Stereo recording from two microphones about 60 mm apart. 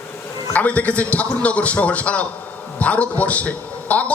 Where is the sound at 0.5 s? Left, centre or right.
Left.